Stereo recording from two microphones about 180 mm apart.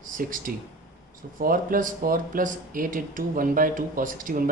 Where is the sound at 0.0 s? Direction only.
50° right (ahead or behind).